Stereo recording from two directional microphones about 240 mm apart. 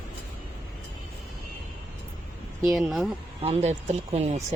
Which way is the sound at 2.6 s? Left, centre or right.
Centre.